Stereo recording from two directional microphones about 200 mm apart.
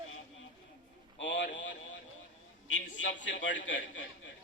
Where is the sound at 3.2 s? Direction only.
65° left (ahead or behind).